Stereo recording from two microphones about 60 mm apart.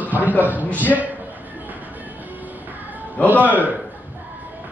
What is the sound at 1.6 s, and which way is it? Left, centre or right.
Music, right.